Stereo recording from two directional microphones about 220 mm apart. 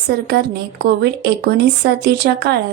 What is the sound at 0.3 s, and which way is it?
Speech, 45° right (ahead or behind).